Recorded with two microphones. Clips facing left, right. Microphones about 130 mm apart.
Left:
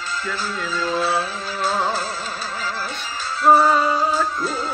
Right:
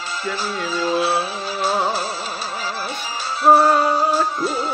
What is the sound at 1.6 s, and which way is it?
Music, 15° right (ahead or behind).